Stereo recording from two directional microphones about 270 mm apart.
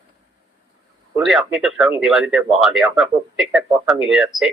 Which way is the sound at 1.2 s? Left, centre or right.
Centre.